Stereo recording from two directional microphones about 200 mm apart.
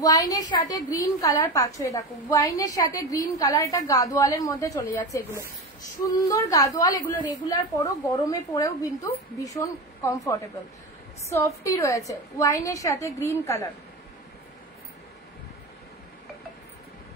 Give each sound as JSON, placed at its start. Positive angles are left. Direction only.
{"t": 0.0, "sound": "a woman's voice", "side_deg": 20}